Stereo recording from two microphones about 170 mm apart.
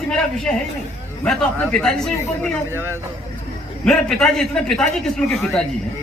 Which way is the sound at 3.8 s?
5° left (ahead or behind).